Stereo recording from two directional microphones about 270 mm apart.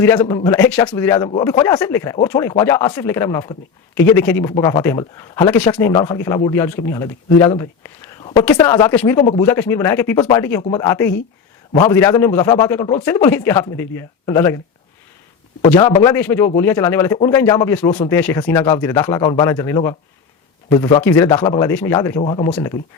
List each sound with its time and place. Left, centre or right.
0.0 s speech: centre
15.6 s speech: centre